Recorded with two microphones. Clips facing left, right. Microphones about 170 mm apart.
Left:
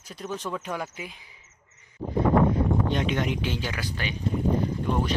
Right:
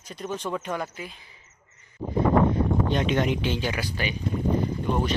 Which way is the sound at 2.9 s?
30° right (ahead or behind).